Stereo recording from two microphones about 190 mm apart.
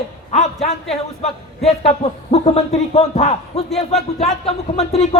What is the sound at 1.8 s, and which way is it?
A man's voice, 30° left (ahead or behind).